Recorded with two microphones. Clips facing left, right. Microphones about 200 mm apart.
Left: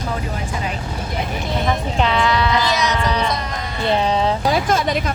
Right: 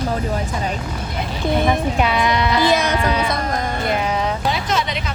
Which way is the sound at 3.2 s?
50° right (ahead or behind).